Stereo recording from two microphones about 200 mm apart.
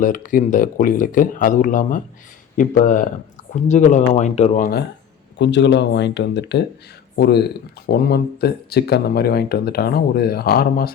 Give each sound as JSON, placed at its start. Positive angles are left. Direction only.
{"t": 0.0, "sound": "speech", "side_deg": 40}
{"t": 5.4, "sound": "speech", "side_deg": 60}